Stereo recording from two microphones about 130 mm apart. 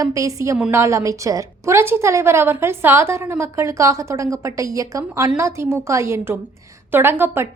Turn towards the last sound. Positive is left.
turn(degrees=-15)  # may be behind; listen again after turning